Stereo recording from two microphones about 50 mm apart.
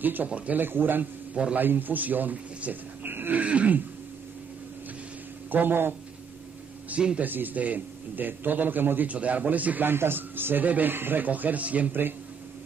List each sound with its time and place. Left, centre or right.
0.0 s a man's voice: right
1.3 s a man's voice: right
1.6 s speech: right
3.3 s neigh: right
5.5 s a man's voice: right
7.0 s neigh: centre
7.2 s speech: right
9.1 s speech: right
9.8 s speech: right